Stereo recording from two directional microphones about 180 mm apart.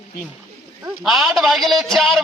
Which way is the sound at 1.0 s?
Centre (ahead or behind).